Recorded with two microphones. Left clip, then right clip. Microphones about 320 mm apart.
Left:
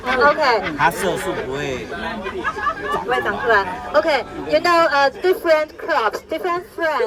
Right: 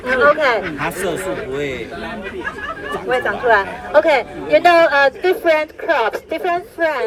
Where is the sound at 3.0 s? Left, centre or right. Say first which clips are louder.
Right 4 dB; centre.